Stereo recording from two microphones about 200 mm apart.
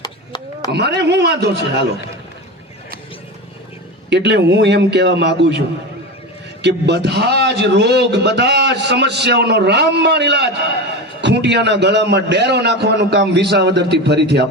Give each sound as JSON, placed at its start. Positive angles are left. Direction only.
{"t": 0.0, "sound": "chop", "side_deg": 20}
{"t": 0.7, "sound": "a man's voice", "side_deg": -55}
{"t": 4.1, "sound": "a man's voice", "side_deg": -60}